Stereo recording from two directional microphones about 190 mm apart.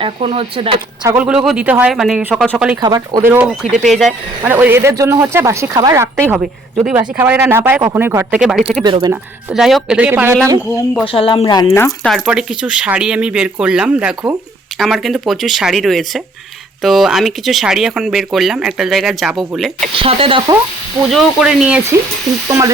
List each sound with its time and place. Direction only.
0.0 s speech: 30° right (ahead or behind)
1.0 s speech: 10° right (ahead or behind)
2.8 s speech: 20° right (ahead or behind); by 4.1 s centre (ahead or behind)
4.4 s speech: 10° right (ahead or behind)
8.8 s speech: 25° right (ahead or behind)
9.5 s speech: centre (ahead or behind)
11.0 s speech: 30° left (ahead or behind)
12.0 s speech: centre (ahead or behind)
19.9 s speech: 30° right (ahead or behind)
21.1 s speech: centre (ahead or behind)
22.4 s speech: 15° right (ahead or behind)